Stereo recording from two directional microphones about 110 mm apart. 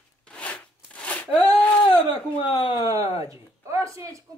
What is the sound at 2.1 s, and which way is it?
Speech, 50° left (ahead or behind).